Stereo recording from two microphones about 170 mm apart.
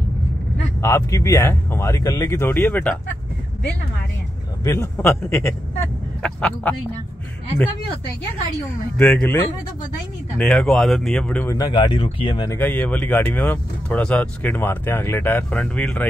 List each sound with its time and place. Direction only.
0.7 s speech: 15° left (ahead or behind)
4.6 s speech: 15° left (ahead or behind)
8.9 s speech: 5° left (ahead or behind)
11.4 s speech: 20° left (ahead or behind)
12.4 s speech: 10° left (ahead or behind)